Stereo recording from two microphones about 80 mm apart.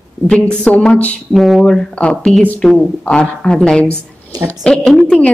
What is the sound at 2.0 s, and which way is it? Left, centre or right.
A woman's voice, centre.